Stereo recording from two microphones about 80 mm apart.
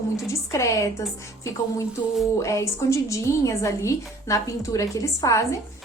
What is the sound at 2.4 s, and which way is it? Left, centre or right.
A woman's voice, left.